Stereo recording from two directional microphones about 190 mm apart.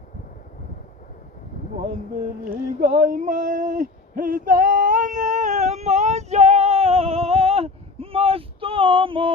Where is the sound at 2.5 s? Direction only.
50° right (ahead or behind).